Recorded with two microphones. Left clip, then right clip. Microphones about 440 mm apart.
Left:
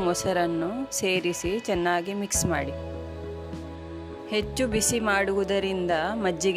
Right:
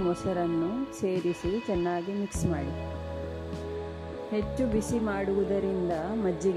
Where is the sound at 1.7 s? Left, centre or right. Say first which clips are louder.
Left 7 dB; left.